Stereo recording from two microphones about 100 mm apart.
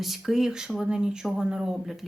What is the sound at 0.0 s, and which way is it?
A woman's voice, centre (ahead or behind).